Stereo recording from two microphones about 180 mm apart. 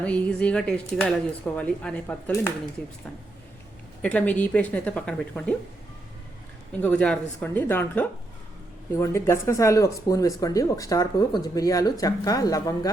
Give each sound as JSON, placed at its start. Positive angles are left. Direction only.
{"t": 0.0, "sound": "a woman's voice", "side_deg": 5}
{"t": 4.0, "sound": "a woman's voice", "side_deg": 10}
{"t": 6.7, "sound": "a woman's voice", "side_deg": 5}